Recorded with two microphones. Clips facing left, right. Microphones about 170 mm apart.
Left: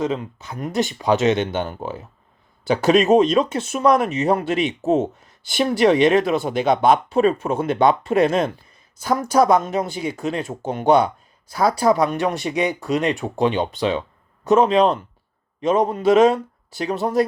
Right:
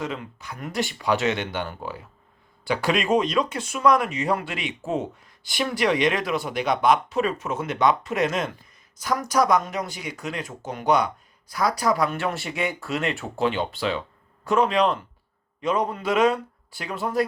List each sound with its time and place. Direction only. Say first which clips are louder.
0.0 s speech: left 8 dB; 20° left (ahead or behind)
2.7 s speech: left 8 dB; 45° left (ahead or behind)
3.2 s speech: left 6 dB; 25° left (ahead or behind)
16.0 s speech: left 7 dB; 25° left (ahead or behind)